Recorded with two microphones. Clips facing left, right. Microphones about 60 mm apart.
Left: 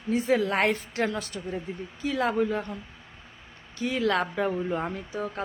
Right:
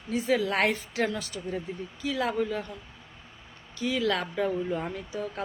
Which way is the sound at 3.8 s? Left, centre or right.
Left.